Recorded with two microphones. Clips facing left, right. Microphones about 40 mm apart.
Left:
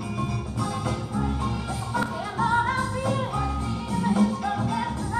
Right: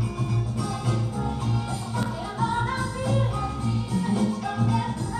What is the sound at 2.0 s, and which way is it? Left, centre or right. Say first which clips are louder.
Music: left 2 dB; centre.